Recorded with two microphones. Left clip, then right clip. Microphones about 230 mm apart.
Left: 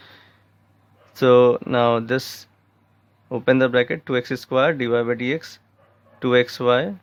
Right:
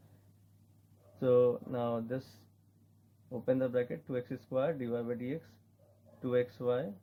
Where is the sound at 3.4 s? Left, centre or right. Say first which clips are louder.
Left 15 dB; left.